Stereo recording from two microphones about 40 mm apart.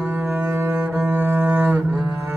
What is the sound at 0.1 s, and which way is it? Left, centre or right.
Cello, right.